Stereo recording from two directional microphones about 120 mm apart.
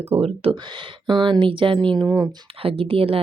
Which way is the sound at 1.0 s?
40° right (ahead or behind).